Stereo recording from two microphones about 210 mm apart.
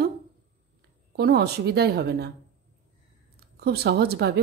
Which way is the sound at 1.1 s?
50° right (ahead or behind).